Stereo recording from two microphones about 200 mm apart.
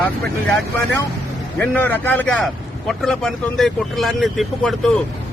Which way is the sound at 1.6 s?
10° left (ahead or behind).